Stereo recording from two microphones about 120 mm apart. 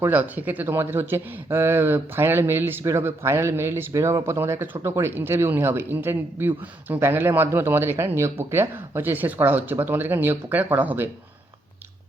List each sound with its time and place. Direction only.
0.0 s speech: 15° right (ahead or behind)